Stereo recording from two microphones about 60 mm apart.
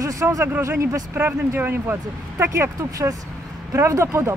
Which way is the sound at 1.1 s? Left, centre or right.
Right.